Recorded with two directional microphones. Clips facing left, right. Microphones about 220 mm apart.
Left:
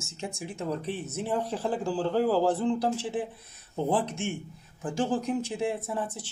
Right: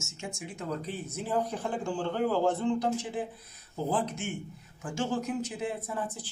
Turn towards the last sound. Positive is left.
turn(degrees=30)  # may be behind; listen again after turning